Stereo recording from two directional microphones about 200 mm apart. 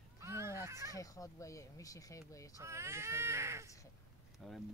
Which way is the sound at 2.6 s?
15° right (ahead or behind).